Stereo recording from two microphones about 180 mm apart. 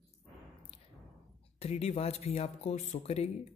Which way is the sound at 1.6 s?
35° left (ahead or behind).